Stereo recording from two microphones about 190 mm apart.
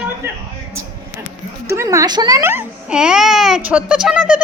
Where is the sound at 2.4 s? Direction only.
10° right (ahead or behind).